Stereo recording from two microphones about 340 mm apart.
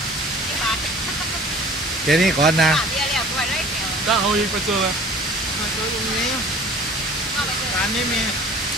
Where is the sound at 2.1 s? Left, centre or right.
Centre.